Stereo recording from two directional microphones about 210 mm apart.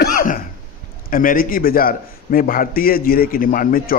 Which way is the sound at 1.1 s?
40° left (ahead or behind).